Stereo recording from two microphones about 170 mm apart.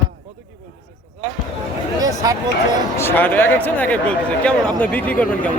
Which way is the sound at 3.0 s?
10° left (ahead or behind).